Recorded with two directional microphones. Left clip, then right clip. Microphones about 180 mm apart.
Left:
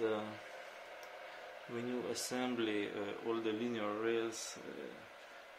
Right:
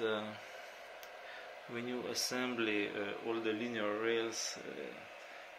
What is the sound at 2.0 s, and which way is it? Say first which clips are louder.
Speech: right 2 dB; 15° left (ahead or behind).